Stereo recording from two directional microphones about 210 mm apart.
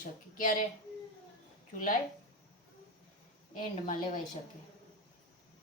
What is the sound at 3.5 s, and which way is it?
Speech, 40° left (ahead or behind).